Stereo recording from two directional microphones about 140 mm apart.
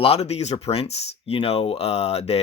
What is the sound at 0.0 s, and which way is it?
Speech, 45° left (ahead or behind).